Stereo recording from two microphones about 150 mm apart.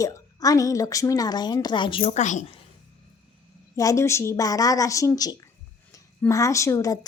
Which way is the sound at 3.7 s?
20° left (ahead or behind).